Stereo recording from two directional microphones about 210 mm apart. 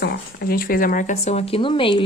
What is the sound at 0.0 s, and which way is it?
Speech, 50° left (ahead or behind).